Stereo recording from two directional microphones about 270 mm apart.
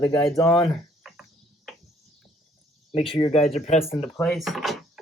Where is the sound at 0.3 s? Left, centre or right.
Centre.